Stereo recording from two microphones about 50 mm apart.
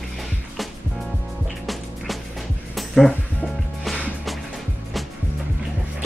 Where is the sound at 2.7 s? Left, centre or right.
Centre.